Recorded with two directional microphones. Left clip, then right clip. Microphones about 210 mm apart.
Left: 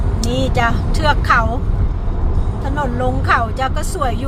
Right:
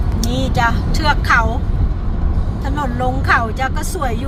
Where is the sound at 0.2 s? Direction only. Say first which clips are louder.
Even; 5° left (ahead or behind).